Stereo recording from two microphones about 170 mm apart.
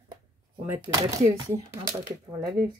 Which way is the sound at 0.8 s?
25° right (ahead or behind).